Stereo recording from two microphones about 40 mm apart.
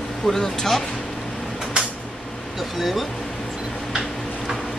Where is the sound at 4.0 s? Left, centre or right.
Centre.